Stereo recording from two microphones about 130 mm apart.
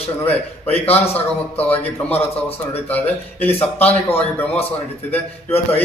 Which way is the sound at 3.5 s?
50° left (ahead or behind).